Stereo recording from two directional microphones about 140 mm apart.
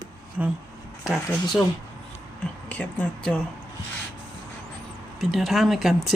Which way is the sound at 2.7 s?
10° left (ahead or behind).